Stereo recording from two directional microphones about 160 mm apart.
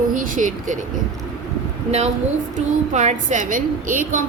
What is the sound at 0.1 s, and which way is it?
Speech, 55° right (ahead or behind).